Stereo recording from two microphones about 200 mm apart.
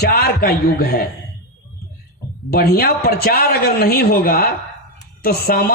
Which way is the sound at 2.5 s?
50° left (ahead or behind).